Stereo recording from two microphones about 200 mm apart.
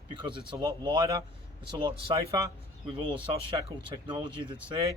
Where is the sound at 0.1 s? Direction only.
25° right (ahead or behind).